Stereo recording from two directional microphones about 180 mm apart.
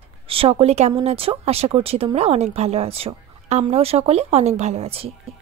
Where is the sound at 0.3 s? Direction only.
30° right (ahead or behind).